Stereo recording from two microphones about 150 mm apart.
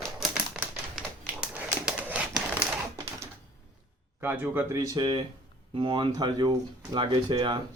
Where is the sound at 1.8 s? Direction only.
10° right (ahead or behind).